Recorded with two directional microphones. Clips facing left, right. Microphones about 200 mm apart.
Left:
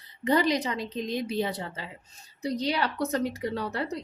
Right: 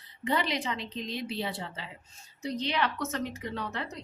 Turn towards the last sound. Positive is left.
turn(degrees=35)  # may be behind; listen again after turning